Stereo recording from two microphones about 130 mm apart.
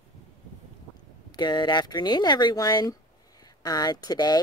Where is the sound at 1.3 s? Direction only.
35° left (ahead or behind).